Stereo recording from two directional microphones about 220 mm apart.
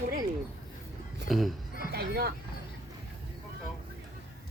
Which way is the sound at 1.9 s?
45° right (ahead or behind).